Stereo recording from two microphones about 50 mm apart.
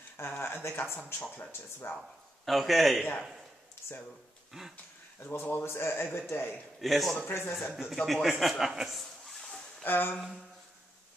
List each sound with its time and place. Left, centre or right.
0.2 s speech: left
1.2 s speech: left
1.9 s speech: left
2.4 s a man's voice: centre
4.5 s speech: centre
5.4 s speech: left
6.8 s a man's voice: centre
7.2 s speech: left
7.7 s a man's voice: centre
9.3 s a sound: centre
9.8 s speech: left